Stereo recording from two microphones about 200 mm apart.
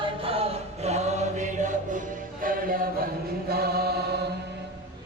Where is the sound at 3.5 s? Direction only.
50° right (ahead or behind).